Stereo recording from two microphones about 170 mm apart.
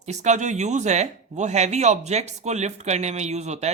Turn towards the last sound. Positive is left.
turn(degrees=-40)  # may be behind; listen again after turning